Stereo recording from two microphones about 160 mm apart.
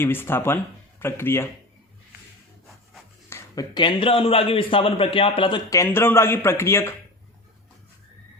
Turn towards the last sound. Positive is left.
turn(degrees=15)  # may be behind; listen again after turning